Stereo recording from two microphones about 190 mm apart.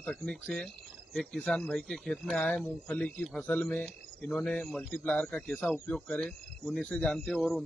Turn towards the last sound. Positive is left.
turn(degrees=0)  # may be behind; listen again after turning